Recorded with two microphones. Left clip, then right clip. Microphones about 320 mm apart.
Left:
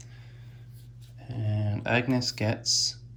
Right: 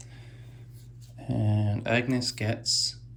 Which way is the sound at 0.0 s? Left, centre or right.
Centre.